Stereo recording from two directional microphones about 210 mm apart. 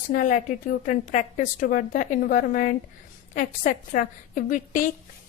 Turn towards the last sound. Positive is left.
turn(degrees=40)  # may be behind; listen again after turning